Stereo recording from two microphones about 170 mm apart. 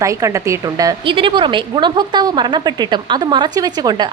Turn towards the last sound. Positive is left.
turn(degrees=-25)  # may be behind; listen again after turning